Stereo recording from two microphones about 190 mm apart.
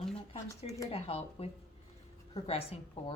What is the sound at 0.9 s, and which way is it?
Speech, 30° left (ahead or behind).